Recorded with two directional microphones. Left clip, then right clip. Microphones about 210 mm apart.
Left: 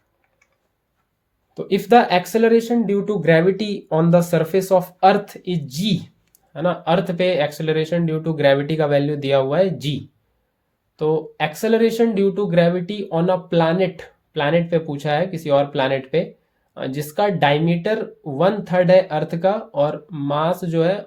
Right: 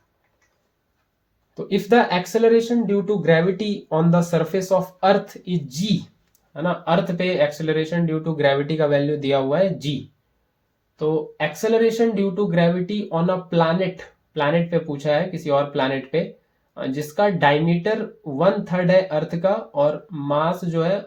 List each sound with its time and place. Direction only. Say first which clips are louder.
1.5 s speech: left 3 dB; 40° left (ahead or behind)
10.9 s speech: left 2 dB; 45° left (ahead or behind)